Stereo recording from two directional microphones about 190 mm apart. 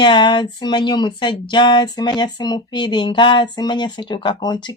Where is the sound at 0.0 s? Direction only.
25° left (ahead or behind).